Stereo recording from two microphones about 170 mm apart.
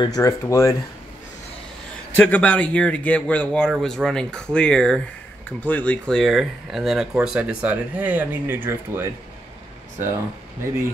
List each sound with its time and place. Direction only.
0.0 s speech: 20° left (ahead or behind)
2.1 s speech: 10° left (ahead or behind); by 9.1 s 15° right (ahead or behind)